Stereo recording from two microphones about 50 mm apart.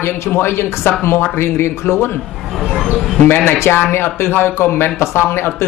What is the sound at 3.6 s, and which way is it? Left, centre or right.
Speech, left.